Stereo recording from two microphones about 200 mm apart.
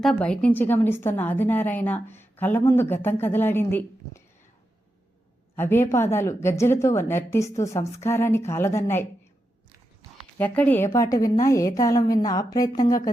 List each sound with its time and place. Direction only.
0.0 s a woman's voice: 5° left (ahead or behind)
5.5 s a woman's voice: 10° left (ahead or behind)
10.3 s a woman's voice: 10° left (ahead or behind)